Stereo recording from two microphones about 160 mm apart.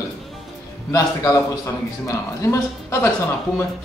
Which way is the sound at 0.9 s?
20° left (ahead or behind).